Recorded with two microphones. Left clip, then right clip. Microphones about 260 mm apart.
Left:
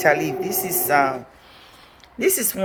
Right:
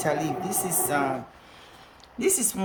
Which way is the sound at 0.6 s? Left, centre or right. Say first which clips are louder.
Left 9 dB; centre.